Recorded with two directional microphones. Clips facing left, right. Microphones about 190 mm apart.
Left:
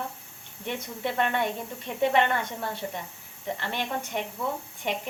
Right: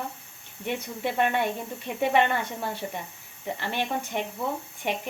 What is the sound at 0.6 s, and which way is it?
Speech, 15° right (ahead or behind).